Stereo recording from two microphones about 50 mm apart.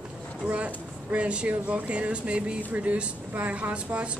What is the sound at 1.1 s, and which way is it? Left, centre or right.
Speech, right.